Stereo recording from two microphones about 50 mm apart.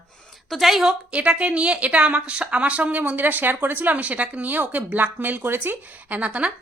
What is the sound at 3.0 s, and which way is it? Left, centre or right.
Speech, right.